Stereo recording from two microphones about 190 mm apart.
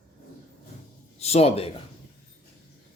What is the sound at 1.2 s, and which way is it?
Speech, 35° left (ahead or behind).